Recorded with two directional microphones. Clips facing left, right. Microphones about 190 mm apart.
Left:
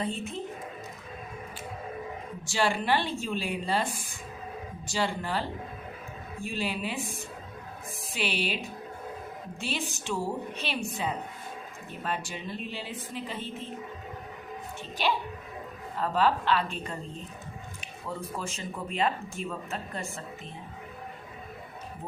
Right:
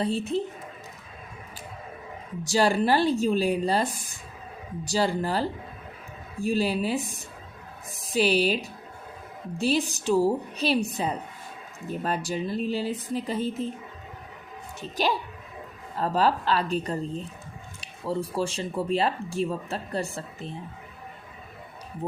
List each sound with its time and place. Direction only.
0.0 s speech: 35° right (ahead or behind)
2.4 s speech: 40° right (ahead or behind)
14.8 s speech: 40° right (ahead or behind)